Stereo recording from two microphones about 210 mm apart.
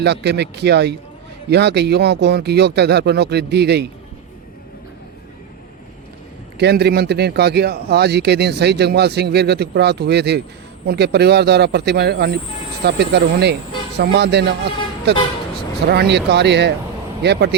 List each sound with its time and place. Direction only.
0.0 s a man's voice: 55° right (ahead or behind)
6.6 s a man's voice: 50° right (ahead or behind)